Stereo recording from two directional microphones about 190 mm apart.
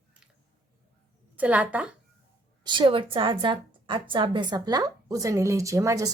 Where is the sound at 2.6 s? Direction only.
25° right (ahead or behind).